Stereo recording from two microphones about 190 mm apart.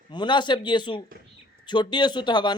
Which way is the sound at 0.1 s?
25° left (ahead or behind).